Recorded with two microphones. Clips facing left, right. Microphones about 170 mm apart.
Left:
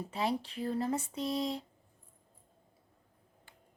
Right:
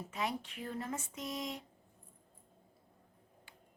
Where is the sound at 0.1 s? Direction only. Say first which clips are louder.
Left 5 dB; 30° left (ahead or behind).